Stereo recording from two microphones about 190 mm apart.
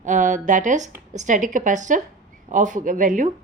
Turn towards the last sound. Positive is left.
turn(degrees=-40)  # may be behind; listen again after turning